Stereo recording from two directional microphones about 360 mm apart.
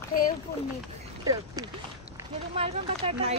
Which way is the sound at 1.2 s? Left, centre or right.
Centre.